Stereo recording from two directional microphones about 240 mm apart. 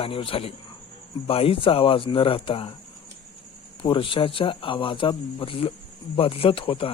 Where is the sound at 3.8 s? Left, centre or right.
Left.